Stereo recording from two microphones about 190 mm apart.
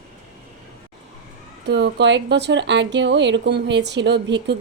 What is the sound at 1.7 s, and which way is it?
A woman's voice, 65° right (ahead or behind).